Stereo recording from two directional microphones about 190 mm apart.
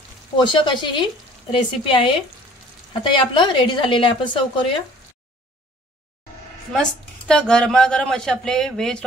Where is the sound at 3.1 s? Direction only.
25° left (ahead or behind).